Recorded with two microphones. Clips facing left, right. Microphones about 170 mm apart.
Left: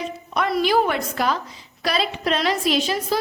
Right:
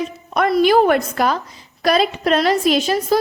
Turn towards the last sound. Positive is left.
turn(degrees=-50)  # may be behind; listen again after turning